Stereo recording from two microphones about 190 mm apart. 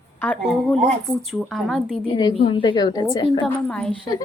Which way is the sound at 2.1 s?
25° left (ahead or behind).